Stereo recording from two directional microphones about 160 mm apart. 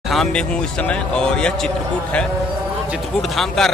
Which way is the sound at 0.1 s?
5° left (ahead or behind).